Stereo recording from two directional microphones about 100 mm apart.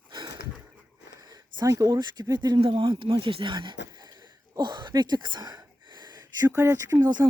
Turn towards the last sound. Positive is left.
turn(degrees=-45)  # may be behind; listen again after turning